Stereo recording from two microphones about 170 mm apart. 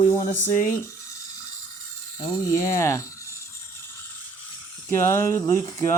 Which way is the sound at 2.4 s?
20° left (ahead or behind).